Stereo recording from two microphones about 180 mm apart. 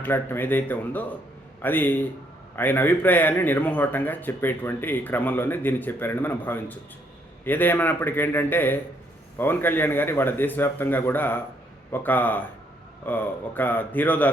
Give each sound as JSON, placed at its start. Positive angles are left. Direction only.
{"t": 0.0, "sound": "speech", "side_deg": 10}